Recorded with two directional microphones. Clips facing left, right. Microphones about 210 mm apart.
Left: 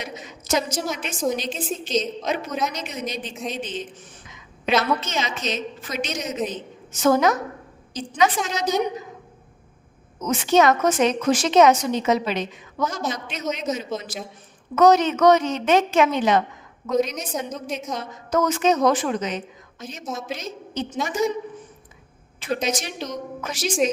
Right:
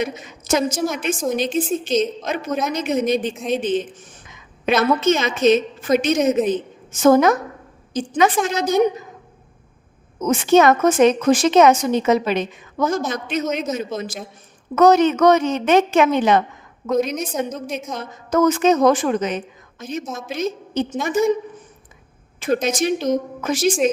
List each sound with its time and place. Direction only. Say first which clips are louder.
0.0 s a woman's voice: right 9 dB; 50° right (ahead or behind)
10.2 s a woman's voice: right 4 dB; 55° right (ahead or behind)
22.4 s a woman's voice: right 6 dB; 50° right (ahead or behind)